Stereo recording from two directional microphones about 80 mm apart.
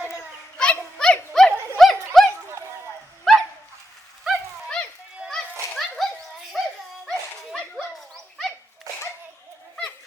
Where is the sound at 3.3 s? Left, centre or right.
Centre.